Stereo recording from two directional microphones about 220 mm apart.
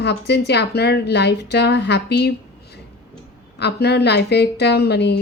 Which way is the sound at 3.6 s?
50° left (ahead or behind).